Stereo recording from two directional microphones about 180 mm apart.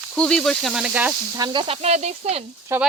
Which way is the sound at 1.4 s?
30° right (ahead or behind).